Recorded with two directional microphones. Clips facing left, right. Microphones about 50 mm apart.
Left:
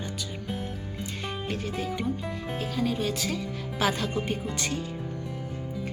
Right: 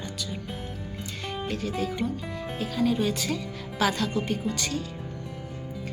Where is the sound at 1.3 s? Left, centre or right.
Centre.